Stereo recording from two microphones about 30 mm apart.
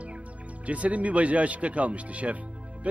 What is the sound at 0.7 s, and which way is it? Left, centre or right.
Speech, right.